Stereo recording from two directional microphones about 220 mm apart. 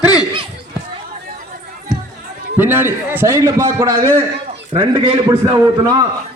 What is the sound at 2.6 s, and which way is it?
A man's voice, 10° right (ahead or behind).